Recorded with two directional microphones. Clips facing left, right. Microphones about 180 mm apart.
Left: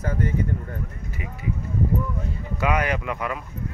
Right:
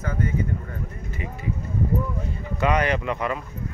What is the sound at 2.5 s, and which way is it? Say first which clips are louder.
Speech: right 2 dB; 5° left (ahead or behind).